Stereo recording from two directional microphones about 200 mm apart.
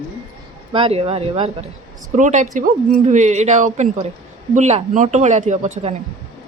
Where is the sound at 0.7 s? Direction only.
25° right (ahead or behind).